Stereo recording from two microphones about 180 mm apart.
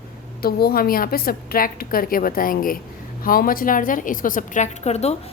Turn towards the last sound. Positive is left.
turn(degrees=35)  # may be behind; listen again after turning